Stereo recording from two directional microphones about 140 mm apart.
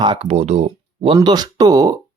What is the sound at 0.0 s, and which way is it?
Speech, 40° right (ahead or behind).